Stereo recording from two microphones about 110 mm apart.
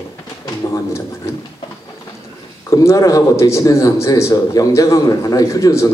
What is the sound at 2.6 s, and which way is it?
Speech, 30° left (ahead or behind).